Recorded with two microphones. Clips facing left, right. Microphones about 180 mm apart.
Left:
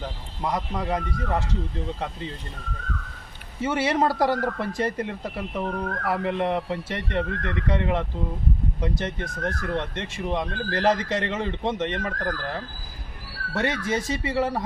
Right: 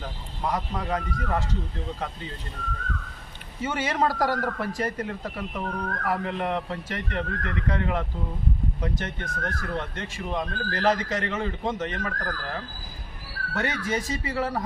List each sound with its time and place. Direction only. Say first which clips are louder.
0.4 s speech: left 2 dB; 15° left (ahead or behind)
3.6 s speech: left 3 dB; 30° left (ahead or behind)
13.5 s speech: left 2 dB; 25° left (ahead or behind)